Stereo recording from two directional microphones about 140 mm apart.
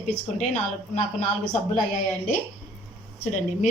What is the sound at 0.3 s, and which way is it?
Speech, 60° left (ahead or behind).